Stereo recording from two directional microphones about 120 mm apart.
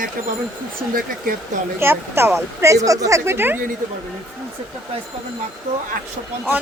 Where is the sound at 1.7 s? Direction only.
20° right (ahead or behind).